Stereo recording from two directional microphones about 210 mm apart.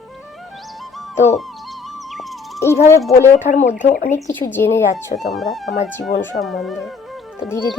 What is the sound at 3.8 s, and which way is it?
Speech, 35° left (ahead or behind).